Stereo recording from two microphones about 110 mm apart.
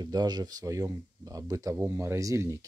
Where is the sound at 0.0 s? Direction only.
35° right (ahead or behind).